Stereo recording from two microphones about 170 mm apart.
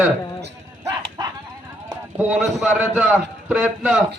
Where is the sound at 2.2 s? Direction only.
5° right (ahead or behind).